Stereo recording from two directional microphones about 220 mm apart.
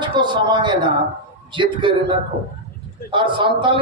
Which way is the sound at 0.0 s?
20° right (ahead or behind).